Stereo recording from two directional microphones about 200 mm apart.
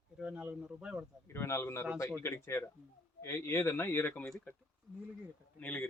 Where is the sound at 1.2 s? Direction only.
15° left (ahead or behind).